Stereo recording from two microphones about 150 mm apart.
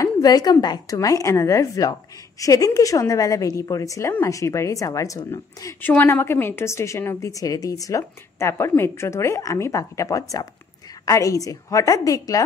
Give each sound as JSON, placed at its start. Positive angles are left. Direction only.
{"t": 0.0, "sound": "a woman's voice", "side_deg": 25}